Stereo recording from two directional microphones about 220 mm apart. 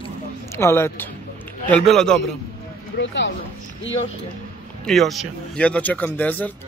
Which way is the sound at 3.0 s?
55° left (ahead or behind).